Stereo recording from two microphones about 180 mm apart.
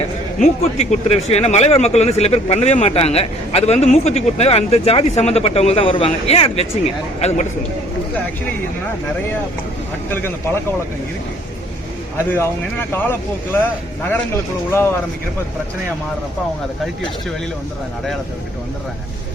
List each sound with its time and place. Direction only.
0.0 s speech: 40° left (ahead or behind)
10.1 s speech: 10° left (ahead or behind)
12.1 s speech: 15° left (ahead or behind)
14.7 s speech: 15° left (ahead or behind)